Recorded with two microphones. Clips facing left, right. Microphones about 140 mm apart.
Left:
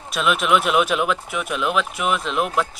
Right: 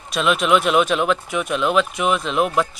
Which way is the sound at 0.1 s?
5° left (ahead or behind).